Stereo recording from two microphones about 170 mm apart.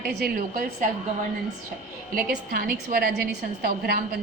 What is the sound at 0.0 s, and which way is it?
Speech, 65° right (ahead or behind).